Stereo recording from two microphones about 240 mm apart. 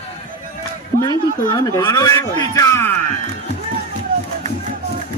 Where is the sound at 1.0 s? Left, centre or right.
Centre.